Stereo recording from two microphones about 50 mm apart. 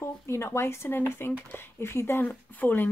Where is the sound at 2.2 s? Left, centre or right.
Left.